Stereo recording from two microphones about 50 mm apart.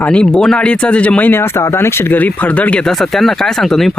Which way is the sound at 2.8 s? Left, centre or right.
Centre.